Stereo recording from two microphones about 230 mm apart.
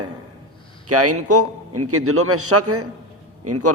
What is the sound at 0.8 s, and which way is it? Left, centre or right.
A man's voice, right.